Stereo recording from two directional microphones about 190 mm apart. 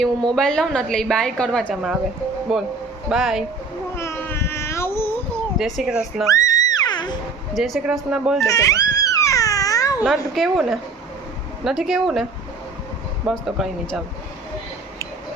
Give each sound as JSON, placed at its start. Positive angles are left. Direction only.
{"t": 0.3, "sound": "a woman's voice", "side_deg": 5}
{"t": 3.9, "sound": "cat", "side_deg": 15}
{"t": 5.5, "sound": "a woman's voice", "side_deg": 0}
{"t": 6.2, "sound": "music", "side_deg": 15}
{"t": 7.5, "sound": "a woman's voice", "side_deg": 0}
{"t": 8.4, "sound": "a sound", "side_deg": 15}
{"t": 10.3, "sound": "a woman's voice", "side_deg": 0}
{"t": 13.2, "sound": "a woman's voice", "side_deg": 0}